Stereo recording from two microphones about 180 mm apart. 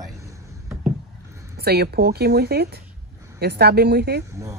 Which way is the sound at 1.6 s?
60° right (ahead or behind).